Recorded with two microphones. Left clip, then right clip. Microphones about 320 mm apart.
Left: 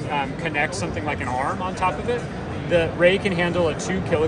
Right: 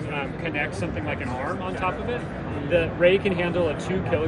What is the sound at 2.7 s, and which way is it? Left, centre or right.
Speech, left.